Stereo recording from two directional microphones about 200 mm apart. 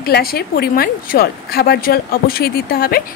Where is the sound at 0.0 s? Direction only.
50° left (ahead or behind).